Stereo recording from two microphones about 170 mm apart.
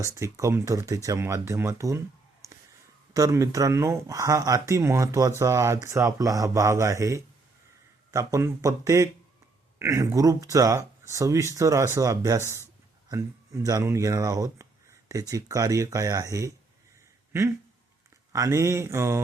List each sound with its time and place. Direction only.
0.0 s speech: 15° right (ahead or behind)
3.1 s speech: 20° right (ahead or behind)
18.3 s speech: 20° right (ahead or behind)